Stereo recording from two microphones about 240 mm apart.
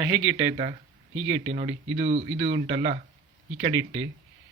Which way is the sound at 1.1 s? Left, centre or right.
Right.